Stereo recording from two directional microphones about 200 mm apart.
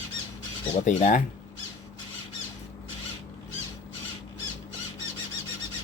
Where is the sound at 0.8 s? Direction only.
40° left (ahead or behind).